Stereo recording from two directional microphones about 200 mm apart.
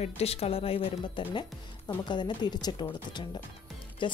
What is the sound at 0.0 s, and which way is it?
A woman's voice, 30° left (ahead or behind).